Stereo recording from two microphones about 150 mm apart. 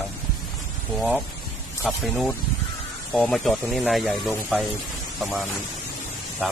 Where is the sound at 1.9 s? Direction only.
Centre (ahead or behind).